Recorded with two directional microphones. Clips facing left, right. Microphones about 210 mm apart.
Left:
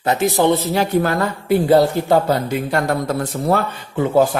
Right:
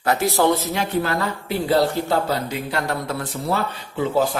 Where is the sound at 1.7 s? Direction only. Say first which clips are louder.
Left 4 dB; 50° left (ahead or behind).